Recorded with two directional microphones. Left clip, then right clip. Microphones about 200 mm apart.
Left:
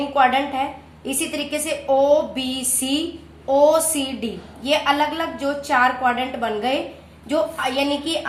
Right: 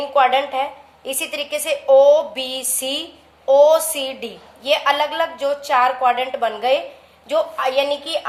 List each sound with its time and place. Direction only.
0.1 s a woman's voice: 45° right (ahead or behind)